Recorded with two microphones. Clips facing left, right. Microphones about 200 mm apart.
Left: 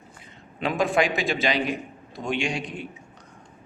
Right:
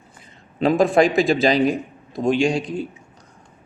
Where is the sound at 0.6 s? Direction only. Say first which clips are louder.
Right 7 dB; 40° right (ahead or behind).